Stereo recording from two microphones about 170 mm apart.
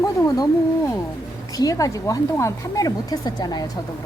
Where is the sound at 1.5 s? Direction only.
20° left (ahead or behind).